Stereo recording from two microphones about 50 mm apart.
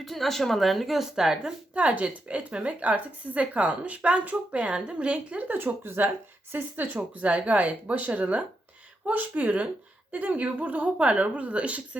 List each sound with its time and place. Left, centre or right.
0.0 s speech: centre; by 5.5 s right
5.5 s speech: right
6.9 s speech: right